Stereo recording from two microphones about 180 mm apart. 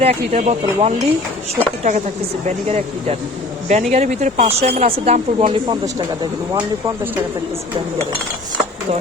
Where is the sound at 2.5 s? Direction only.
35° right (ahead or behind).